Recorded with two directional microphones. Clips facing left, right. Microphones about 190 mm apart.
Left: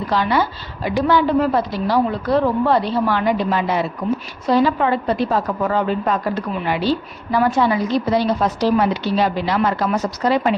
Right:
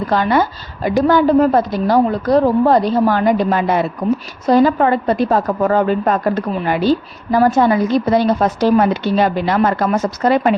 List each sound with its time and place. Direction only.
0.1 s a woman's voice: 50° right (ahead or behind)